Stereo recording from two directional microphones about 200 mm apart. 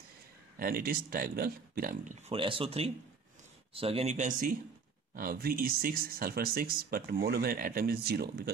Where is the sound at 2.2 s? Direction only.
25° right (ahead or behind).